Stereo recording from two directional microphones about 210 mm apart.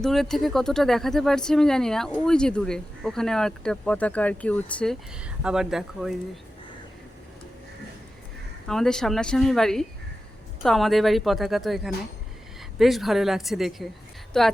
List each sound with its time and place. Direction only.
0.0 s speech: centre (ahead or behind)
8.6 s speech: centre (ahead or behind)